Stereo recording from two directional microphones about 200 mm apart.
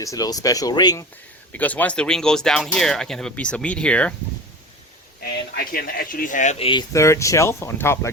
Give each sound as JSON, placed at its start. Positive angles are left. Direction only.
{"t": 0.0, "sound": "speech", "side_deg": 15}
{"t": 1.5, "sound": "speech", "side_deg": 10}
{"t": 5.2, "sound": "speech", "side_deg": 45}